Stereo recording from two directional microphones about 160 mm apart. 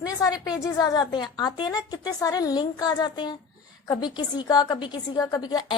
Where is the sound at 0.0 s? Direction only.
20° left (ahead or behind).